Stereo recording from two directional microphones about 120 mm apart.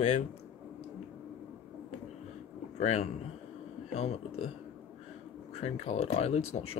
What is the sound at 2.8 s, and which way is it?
Speech, 65° left (ahead or behind).